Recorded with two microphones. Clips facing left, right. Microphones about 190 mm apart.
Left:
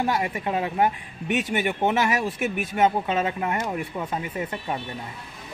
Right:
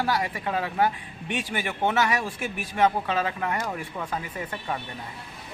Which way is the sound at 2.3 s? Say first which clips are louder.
Left 6 dB; 30° right (ahead or behind).